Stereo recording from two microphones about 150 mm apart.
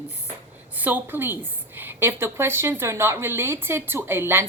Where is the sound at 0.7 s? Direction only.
10° right (ahead or behind).